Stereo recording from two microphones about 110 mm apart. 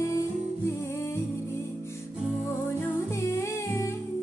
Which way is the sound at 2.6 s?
20° left (ahead or behind).